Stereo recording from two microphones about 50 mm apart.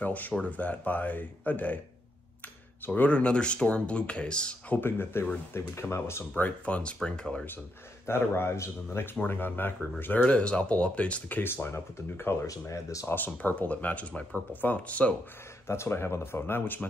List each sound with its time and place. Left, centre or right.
0.0 s speech: left
2.9 s speech: left
4.7 s speech: left
5.5 s speech: left
6.3 s speech: left
8.1 s speech: left
9.1 s speech: left
10.2 s speech: left
11.4 s speech: left
13.1 s speech: left
15.6 s speech: left